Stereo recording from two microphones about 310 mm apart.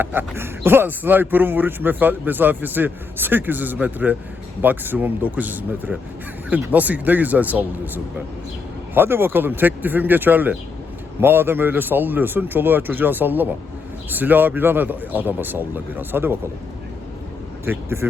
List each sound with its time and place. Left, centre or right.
0.0 s a man's voice: centre
17.7 s speech: centre